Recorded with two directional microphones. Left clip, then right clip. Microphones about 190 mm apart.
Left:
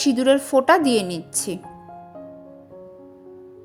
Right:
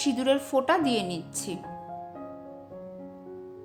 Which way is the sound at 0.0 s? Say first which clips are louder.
Left 7 dB; 25° left (ahead or behind).